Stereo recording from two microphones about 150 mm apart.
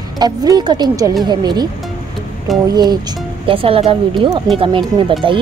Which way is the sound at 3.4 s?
35° right (ahead or behind).